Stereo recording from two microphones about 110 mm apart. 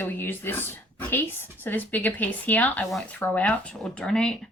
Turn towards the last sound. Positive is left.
turn(degrees=5)  # may be behind; listen again after turning